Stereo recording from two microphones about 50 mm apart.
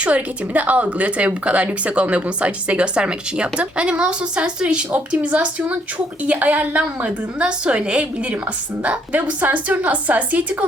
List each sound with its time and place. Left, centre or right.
0.0 s a woman's voice: right